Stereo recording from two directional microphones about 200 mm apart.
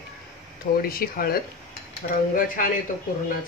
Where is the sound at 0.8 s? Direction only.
45° left (ahead or behind).